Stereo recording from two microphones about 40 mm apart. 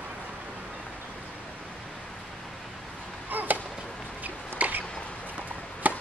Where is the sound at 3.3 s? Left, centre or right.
Right.